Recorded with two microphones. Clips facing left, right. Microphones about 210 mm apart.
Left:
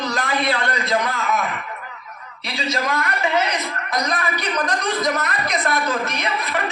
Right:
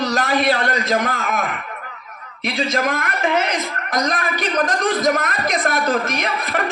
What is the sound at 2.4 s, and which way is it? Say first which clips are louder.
A man's voice: right 4 dB; 50° right (ahead or behind).